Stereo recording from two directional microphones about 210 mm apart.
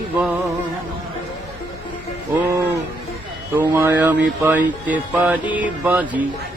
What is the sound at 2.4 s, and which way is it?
Music, 15° right (ahead or behind).